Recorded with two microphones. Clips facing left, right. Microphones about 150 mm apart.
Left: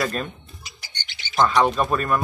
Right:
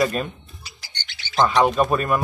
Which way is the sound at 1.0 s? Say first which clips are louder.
Left 1 dB; 20° left (ahead or behind).